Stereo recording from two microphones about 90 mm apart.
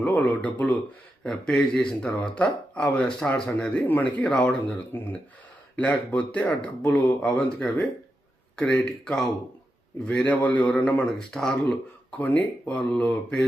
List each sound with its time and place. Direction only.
0.0 s speech: 15° left (ahead or behind)
1.2 s speech: 5° left (ahead or behind)
4.4 s speech: 20° left (ahead or behind)